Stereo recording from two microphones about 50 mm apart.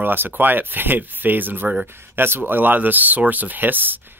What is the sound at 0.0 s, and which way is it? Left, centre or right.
Speech, right.